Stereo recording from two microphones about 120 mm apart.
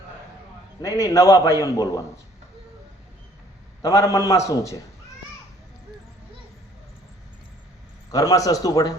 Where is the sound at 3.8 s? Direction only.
25° left (ahead or behind).